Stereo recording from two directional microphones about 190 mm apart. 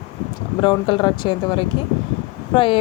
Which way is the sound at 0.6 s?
25° left (ahead or behind).